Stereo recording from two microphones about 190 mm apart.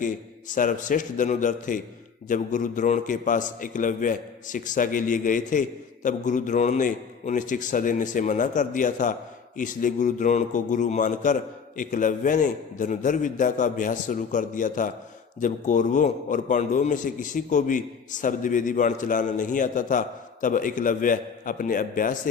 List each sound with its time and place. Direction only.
0.0 s a man's voice: 45° left (ahead or behind)